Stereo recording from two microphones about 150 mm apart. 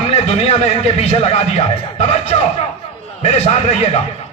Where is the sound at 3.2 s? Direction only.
45° left (ahead or behind).